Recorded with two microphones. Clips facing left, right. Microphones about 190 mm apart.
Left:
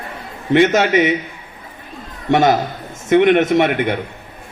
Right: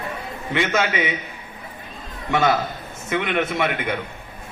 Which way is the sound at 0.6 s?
45° left (ahead or behind).